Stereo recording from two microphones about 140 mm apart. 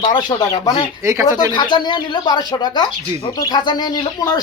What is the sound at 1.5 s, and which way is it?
Speech, 30° left (ahead or behind).